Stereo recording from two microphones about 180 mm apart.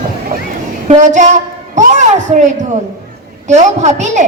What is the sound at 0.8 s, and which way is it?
A woman's voice, 40° right (ahead or behind).